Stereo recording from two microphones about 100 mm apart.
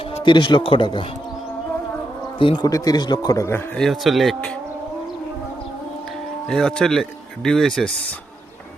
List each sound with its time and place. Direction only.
0.3 s speech: 50° left (ahead or behind)
2.6 s speech: 40° left (ahead or behind)
3.8 s speech: centre (ahead or behind)
6.5 s speech: 5° left (ahead or behind)